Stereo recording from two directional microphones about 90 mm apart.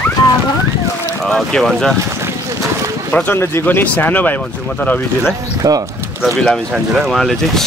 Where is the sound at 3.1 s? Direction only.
15° left (ahead or behind).